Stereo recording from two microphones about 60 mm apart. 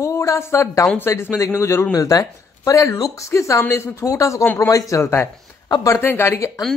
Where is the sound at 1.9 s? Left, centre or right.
Left.